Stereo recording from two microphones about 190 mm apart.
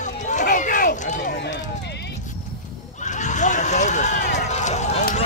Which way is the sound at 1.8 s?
60° left (ahead or behind).